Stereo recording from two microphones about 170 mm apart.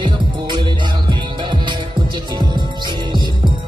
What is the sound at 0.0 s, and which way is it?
Music, 25° right (ahead or behind).